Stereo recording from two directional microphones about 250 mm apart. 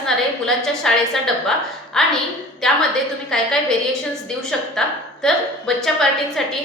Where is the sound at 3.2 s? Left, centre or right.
Centre.